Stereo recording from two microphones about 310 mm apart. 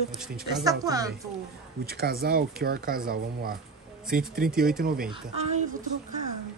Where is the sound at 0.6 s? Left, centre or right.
Centre.